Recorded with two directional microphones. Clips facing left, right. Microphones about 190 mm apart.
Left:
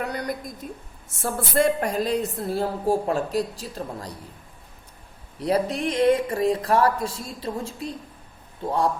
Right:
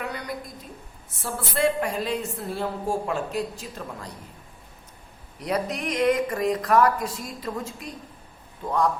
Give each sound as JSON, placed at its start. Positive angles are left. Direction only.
{"t": 0.0, "sound": "a sound", "side_deg": 40}
{"t": 1.2, "sound": "a woman's voice", "side_deg": 45}
{"t": 5.4, "sound": "a woman's voice", "side_deg": 30}